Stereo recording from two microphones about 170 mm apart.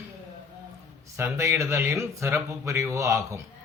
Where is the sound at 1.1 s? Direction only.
15° right (ahead or behind).